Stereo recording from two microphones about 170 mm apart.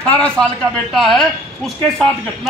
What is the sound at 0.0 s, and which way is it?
A man's voice, 5° left (ahead or behind).